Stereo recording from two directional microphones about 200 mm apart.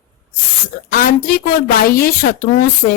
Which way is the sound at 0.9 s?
45° left (ahead or behind).